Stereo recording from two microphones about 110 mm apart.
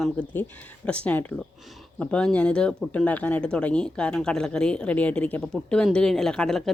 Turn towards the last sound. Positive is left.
turn(degrees=5)  # may be behind; listen again after turning